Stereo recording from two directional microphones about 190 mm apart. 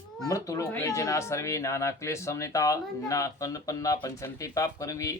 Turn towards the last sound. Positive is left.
turn(degrees=15)  # may be behind; listen again after turning